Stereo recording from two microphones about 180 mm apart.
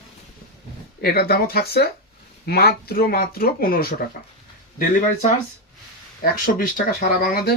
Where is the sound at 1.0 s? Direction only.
60° left (ahead or behind).